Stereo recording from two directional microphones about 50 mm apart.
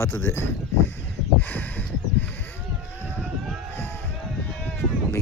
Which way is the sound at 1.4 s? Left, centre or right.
Left.